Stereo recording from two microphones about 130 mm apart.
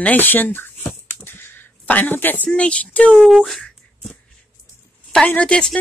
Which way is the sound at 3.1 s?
Centre (ahead or behind).